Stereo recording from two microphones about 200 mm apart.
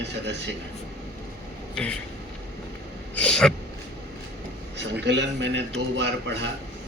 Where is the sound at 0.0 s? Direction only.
60° right (ahead or behind).